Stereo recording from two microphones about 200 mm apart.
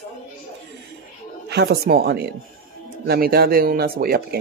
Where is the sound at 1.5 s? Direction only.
55° right (ahead or behind).